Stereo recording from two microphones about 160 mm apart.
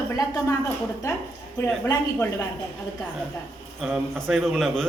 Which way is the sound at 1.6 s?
15° left (ahead or behind).